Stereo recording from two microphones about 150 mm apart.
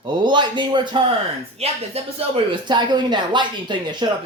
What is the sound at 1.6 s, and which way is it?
Speech, 45° right (ahead or behind).